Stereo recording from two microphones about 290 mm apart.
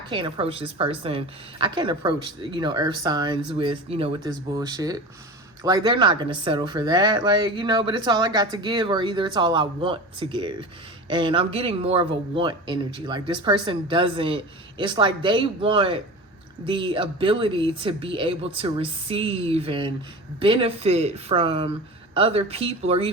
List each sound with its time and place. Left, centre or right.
0.1 s speech: centre